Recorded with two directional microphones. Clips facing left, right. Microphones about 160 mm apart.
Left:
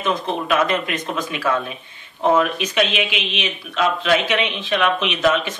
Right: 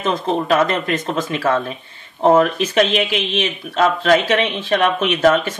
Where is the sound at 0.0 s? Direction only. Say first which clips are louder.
Right 3 dB; 30° right (ahead or behind).